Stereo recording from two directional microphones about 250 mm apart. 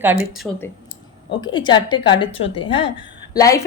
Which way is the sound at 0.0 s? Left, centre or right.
Centre.